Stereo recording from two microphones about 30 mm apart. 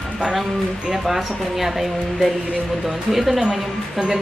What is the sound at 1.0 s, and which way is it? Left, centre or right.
Speech, centre.